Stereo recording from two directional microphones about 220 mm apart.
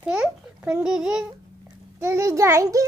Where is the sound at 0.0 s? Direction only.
5° right (ahead or behind).